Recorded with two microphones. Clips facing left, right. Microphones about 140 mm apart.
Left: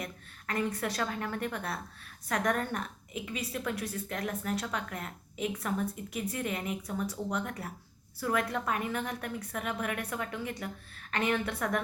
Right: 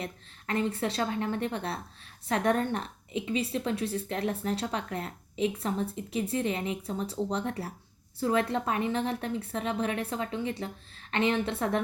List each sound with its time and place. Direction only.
0.0 s a woman's voice: 25° right (ahead or behind)